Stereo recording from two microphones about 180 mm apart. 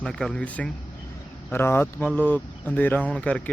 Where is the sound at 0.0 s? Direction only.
5° left (ahead or behind).